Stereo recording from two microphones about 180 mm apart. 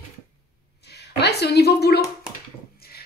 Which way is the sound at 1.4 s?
65° left (ahead or behind).